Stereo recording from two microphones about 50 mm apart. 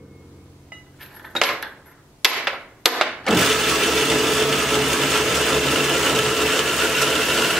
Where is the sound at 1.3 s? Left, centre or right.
Centre.